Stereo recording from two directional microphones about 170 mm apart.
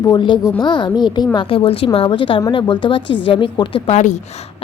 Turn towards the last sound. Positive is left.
turn(degrees=40)  # may be behind; listen again after turning